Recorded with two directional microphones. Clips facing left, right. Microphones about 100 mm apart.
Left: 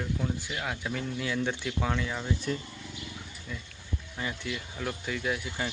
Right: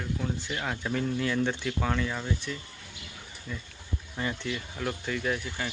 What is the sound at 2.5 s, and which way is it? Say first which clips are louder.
Speech: left 5 dB; 40° left (ahead or behind).